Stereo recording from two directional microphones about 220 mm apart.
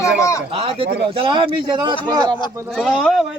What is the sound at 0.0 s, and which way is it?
Speech, 15° left (ahead or behind).